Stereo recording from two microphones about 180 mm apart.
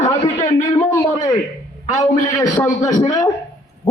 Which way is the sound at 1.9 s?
40° left (ahead or behind).